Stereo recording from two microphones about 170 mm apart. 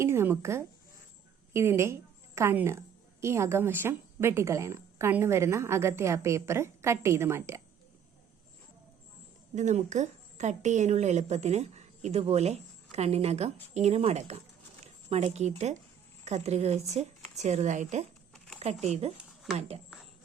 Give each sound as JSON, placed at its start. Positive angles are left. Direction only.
{"t": 0.0, "sound": "a woman's voice", "side_deg": -15}
{"t": 9.6, "sound": "a woman's voice", "side_deg": -45}
{"t": 18.3, "sound": "a sound", "side_deg": 0}
{"t": 18.6, "sound": "speech", "side_deg": -40}